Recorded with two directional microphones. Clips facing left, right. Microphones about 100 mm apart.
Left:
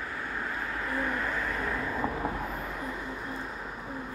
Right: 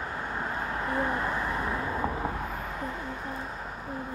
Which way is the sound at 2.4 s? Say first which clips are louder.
Right 1 dB; 5° right (ahead or behind).